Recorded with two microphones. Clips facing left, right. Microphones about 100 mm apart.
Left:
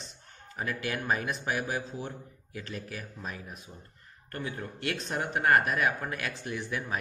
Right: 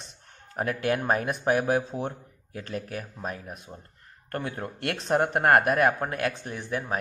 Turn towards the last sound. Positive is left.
turn(degrees=-45)  # may be behind; listen again after turning